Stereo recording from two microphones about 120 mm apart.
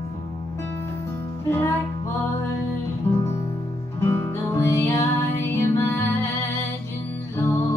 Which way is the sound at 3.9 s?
20° left (ahead or behind).